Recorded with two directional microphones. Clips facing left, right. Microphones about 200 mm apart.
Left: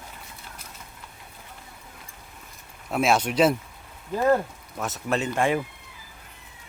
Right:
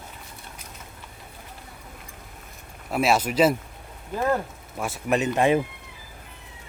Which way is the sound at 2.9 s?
5° right (ahead or behind).